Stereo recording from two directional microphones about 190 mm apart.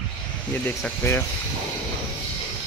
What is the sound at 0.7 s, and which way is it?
Speech, 10° left (ahead or behind).